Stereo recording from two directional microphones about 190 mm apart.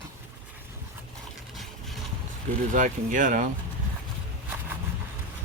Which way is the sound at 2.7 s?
45° right (ahead or behind).